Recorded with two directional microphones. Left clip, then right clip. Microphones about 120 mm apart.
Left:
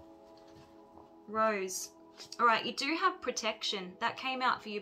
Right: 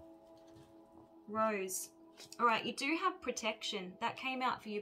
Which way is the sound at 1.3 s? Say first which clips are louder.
Left 4 dB; 20° right (ahead or behind).